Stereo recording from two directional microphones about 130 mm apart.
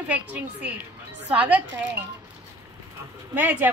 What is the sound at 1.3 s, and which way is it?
Speech, 10° right (ahead or behind).